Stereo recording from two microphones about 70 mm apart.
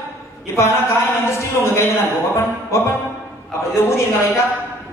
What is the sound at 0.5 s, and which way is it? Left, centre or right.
Speech, left.